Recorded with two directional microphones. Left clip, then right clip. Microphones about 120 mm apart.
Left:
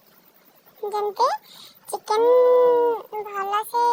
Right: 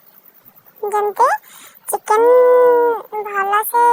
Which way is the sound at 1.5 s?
15° right (ahead or behind).